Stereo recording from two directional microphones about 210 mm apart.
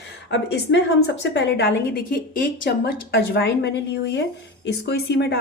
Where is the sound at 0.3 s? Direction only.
55° left (ahead or behind).